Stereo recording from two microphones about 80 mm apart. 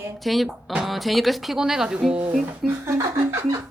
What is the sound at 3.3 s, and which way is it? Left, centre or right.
Speech, right.